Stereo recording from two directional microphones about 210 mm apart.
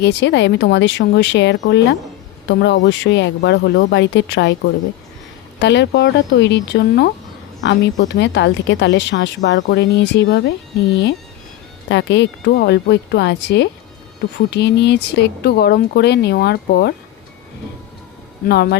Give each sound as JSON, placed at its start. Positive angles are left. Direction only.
{"t": 0.0, "sound": "a woman's voice", "side_deg": 55}
{"t": 5.5, "sound": "a woman's voice", "side_deg": 55}
{"t": 11.9, "sound": "a woman's voice", "side_deg": 60}
{"t": 18.4, "sound": "speech", "side_deg": 50}